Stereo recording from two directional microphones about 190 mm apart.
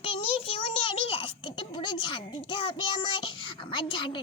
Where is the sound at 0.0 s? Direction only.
30° left (ahead or behind).